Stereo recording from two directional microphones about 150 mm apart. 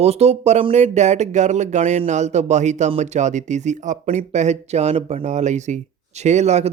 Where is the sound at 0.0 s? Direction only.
45° right (ahead or behind).